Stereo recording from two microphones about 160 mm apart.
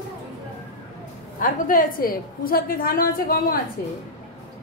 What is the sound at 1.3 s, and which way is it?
A woman's voice, 60° left (ahead or behind).